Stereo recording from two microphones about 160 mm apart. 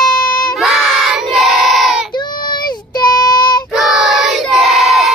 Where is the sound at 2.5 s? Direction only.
25° left (ahead or behind).